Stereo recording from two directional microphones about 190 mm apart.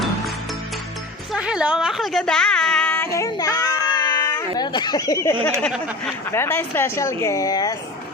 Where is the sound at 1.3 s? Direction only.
5° right (ahead or behind); by 5.3 s 15° left (ahead or behind).